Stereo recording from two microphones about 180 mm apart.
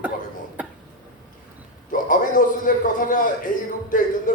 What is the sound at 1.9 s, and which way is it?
A man's voice, 45° left (ahead or behind).